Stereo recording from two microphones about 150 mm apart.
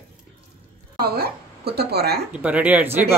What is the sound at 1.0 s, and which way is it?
A woman's voice, 90° right.